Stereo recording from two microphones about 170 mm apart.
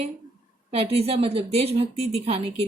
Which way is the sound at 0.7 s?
35° right (ahead or behind).